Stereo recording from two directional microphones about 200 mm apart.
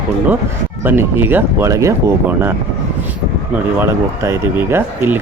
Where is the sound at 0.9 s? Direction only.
10° right (ahead or behind).